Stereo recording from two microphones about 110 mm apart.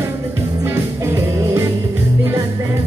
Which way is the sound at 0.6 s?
25° right (ahead or behind).